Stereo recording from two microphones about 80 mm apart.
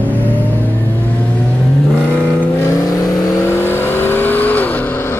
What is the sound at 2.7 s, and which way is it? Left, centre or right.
Vehicle, left.